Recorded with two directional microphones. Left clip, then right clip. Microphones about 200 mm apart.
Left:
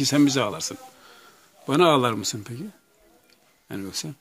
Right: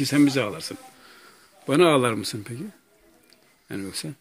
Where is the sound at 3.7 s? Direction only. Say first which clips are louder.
Even; 10° left (ahead or behind).